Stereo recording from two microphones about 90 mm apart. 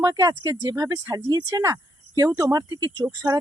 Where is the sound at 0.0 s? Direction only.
45° right (ahead or behind).